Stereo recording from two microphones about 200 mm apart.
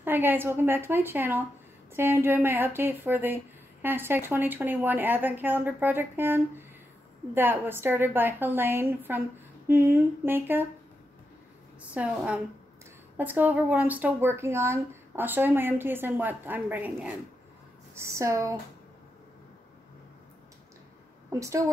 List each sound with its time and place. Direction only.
0.0 s speech: 10° right (ahead or behind)
11.9 s speech: 5° right (ahead or behind)
21.3 s speech: 15° right (ahead or behind)